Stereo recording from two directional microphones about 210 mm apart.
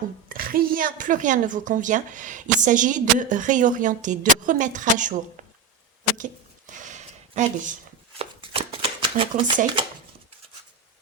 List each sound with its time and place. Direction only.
0.3 s a woman's voice: 45° right (ahead or behind)
6.7 s a sound: 35° right (ahead or behind)
8.2 s shuffling cards: 25° right (ahead or behind)